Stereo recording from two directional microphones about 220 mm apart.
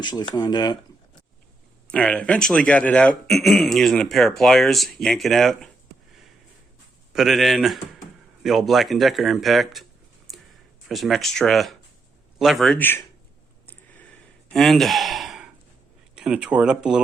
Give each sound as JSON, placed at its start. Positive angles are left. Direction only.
{"t": 0.0, "sound": "speech", "side_deg": 20}
{"t": 1.9, "sound": "speech", "side_deg": 5}
{"t": 7.1, "sound": "speech", "side_deg": 0}
{"t": 10.3, "sound": "a sound", "side_deg": 0}
{"t": 10.8, "sound": "speech", "side_deg": 0}
{"t": 13.7, "sound": "sigh", "side_deg": 5}
{"t": 16.1, "sound": "speech", "side_deg": -5}